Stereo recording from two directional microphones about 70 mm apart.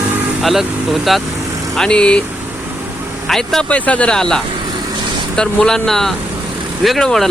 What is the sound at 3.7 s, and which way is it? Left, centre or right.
Speech, centre.